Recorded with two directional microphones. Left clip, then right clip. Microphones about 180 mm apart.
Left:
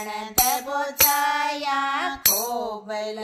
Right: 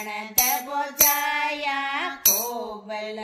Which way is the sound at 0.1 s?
40° left (ahead or behind).